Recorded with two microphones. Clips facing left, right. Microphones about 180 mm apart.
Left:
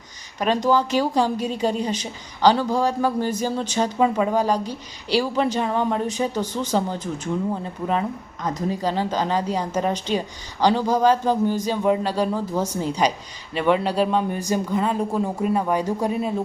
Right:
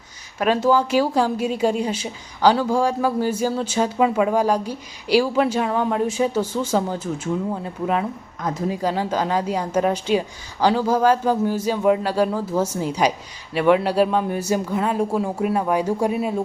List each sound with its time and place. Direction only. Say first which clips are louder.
0.3 s speech: right 2 dB; 5° right (ahead or behind)